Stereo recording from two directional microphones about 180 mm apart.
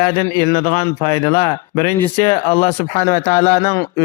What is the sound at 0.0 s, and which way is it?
A man's voice, 25° left (ahead or behind).